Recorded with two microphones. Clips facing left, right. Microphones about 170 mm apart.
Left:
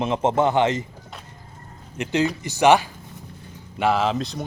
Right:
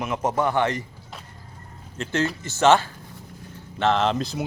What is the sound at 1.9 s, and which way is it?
Speech, 15° left (ahead or behind).